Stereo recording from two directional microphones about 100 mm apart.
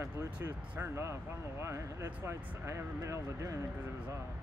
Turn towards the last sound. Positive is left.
turn(degrees=-30)  # may be behind; listen again after turning